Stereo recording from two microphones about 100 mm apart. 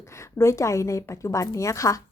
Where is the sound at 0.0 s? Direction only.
30° left (ahead or behind).